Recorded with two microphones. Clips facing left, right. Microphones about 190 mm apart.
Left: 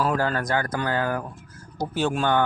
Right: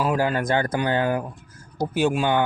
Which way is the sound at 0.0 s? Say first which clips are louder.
Right 2 dB; 15° right (ahead or behind).